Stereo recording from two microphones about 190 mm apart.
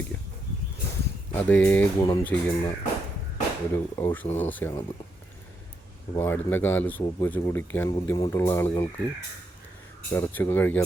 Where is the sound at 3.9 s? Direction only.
10° left (ahead or behind).